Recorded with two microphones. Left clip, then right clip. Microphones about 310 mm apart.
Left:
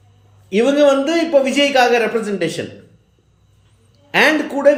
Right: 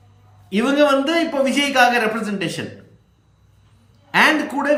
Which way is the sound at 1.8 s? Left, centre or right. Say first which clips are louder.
Right 1 dB; centre.